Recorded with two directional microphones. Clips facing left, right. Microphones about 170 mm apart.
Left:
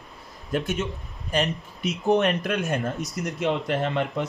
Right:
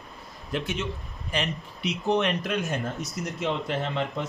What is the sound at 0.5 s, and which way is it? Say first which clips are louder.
Speech: left 3 dB; 50° left (ahead or behind).